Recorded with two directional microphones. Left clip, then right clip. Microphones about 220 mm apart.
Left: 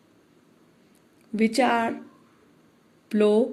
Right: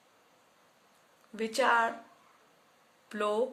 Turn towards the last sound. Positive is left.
turn(degrees=15)  # may be behind; listen again after turning